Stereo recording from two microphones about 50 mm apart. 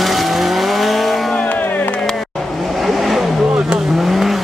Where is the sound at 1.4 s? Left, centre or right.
Left.